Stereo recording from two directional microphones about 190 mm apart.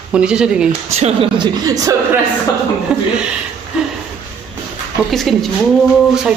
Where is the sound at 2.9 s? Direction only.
5° right (ahead or behind).